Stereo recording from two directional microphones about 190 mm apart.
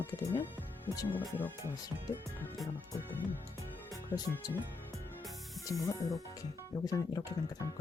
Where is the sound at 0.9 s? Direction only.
15° left (ahead or behind).